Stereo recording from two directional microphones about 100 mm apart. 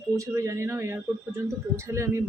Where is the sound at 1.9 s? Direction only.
30° right (ahead or behind).